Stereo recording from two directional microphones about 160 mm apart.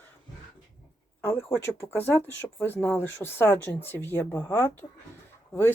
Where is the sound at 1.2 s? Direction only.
15° left (ahead or behind).